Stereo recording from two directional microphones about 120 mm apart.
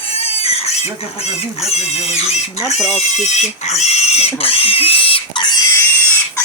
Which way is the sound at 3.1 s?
70° left (ahead or behind).